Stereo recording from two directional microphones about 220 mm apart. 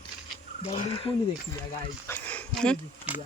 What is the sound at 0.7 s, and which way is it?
Speech, 25° left (ahead or behind).